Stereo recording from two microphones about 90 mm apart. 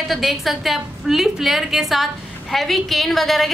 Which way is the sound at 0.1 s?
Centre (ahead or behind).